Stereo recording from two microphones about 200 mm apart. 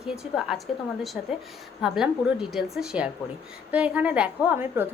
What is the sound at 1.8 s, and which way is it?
A woman's voice, centre (ahead or behind).